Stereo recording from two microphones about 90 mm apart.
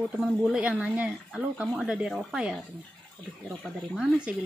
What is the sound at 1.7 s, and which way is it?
Speech, centre (ahead or behind).